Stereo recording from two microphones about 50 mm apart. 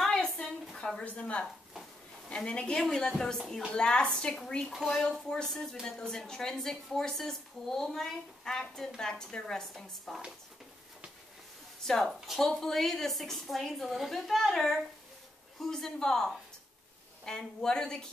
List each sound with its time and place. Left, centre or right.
0.1 s a sound: centre
0.9 s a woman's voice: left
1.4 s a sound: centre
2.2 s a woman's voice: left
4.7 s a woman's voice: centre
5.0 s a woman's voice: centre
11.8 s a woman's voice: centre